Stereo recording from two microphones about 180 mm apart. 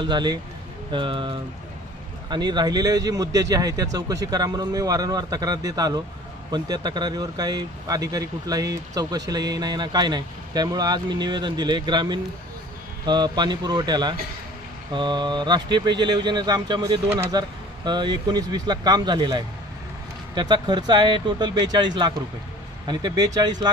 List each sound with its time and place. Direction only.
0.0 s speech: 25° right (ahead or behind)